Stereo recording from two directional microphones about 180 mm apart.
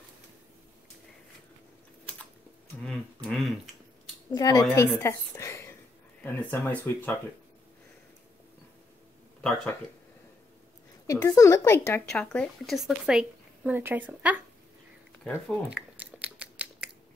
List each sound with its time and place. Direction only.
2.8 s a sound: 5° left (ahead or behind)
4.3 s a woman's voice: 20° left (ahead or behind)
9.4 s speech: 5° left (ahead or behind)
11.1 s speech: 15° left (ahead or behind); by 14.4 s 10° right (ahead or behind)
15.4 s scissors: 5° right (ahead or behind)